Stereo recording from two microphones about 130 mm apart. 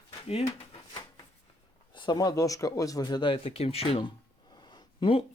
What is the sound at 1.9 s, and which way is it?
Speech, 35° left (ahead or behind).